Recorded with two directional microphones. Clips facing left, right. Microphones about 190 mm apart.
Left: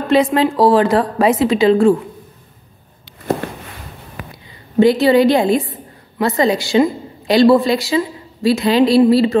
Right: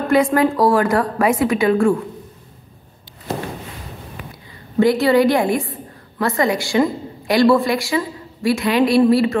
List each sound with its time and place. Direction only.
0.1 s a woman's voice: 25° left (ahead or behind)
4.7 s a woman's voice: 25° left (ahead or behind)